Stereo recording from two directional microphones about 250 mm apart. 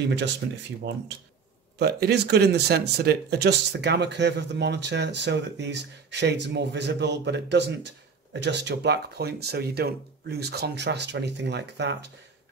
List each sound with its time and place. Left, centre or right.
1.8 s speech: right